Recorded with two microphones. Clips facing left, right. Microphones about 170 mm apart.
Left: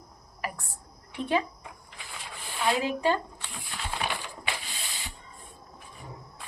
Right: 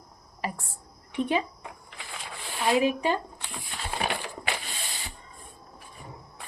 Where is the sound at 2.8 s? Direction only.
15° right (ahead or behind).